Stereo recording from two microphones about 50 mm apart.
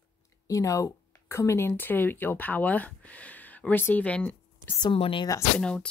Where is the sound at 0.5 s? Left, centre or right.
Left.